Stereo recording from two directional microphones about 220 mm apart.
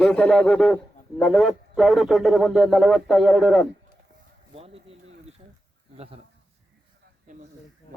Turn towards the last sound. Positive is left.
turn(degrees=-30)  # may be behind; listen again after turning